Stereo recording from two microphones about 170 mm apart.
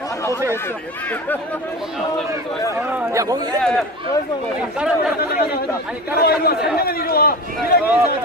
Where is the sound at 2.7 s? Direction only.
10° right (ahead or behind).